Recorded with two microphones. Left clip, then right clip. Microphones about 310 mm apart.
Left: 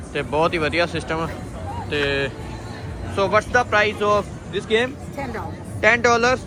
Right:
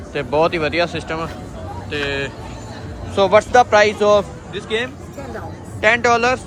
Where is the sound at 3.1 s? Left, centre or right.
Centre.